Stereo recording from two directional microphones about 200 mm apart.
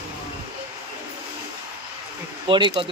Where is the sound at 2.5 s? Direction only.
25° right (ahead or behind).